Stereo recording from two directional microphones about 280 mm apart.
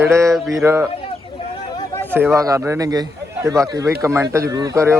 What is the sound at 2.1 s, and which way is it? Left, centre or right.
A man's voice, centre.